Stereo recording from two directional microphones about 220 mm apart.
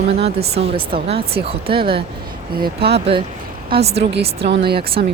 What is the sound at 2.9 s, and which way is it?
Speech, 25° right (ahead or behind).